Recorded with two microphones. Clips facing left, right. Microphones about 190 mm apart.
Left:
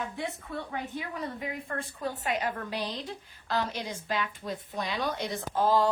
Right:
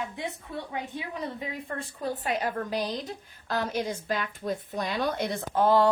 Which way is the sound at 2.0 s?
35° right (ahead or behind).